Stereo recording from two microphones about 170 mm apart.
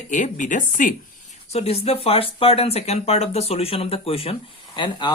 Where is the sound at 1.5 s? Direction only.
35° left (ahead or behind).